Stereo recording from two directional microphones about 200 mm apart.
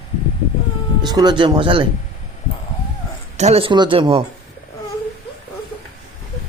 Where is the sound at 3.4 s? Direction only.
30° right (ahead or behind).